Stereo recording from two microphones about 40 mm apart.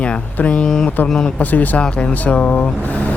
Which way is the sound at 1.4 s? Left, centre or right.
Left.